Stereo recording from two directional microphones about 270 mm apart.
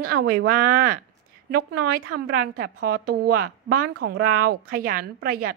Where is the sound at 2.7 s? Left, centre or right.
Right.